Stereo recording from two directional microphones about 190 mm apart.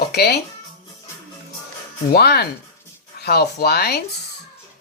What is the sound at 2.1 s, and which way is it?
Speech, 55° left (ahead or behind).